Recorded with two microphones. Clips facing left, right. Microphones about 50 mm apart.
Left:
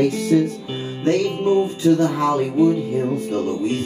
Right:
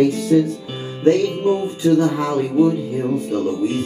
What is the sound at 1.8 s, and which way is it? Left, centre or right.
Speech, centre.